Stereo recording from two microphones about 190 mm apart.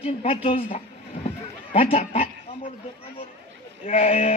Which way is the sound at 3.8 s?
35° left (ahead or behind).